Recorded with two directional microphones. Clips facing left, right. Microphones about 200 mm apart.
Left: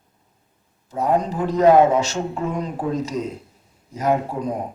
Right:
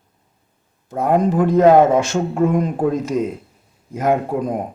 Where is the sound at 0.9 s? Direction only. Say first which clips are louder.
Right 4 dB; 55° right (ahead or behind).